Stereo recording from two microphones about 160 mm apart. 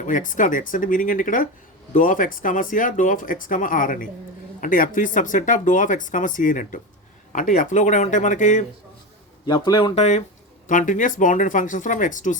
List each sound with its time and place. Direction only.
0.0 s speech: 55° left (ahead or behind)
9.5 s speech: 25° left (ahead or behind)
9.9 s speech: 45° left (ahead or behind)